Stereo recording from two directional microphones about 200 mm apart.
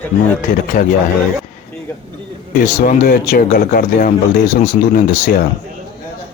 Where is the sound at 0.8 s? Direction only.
40° left (ahead or behind).